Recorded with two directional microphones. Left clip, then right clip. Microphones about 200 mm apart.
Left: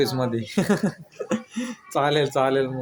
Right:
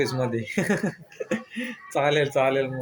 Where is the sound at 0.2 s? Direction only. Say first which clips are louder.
Left 1 dB; 10° left (ahead or behind).